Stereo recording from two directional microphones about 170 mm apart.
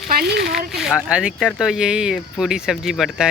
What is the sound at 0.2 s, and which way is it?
Speech, 75° right (ahead or behind).